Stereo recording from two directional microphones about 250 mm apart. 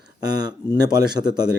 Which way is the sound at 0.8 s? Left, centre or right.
Centre.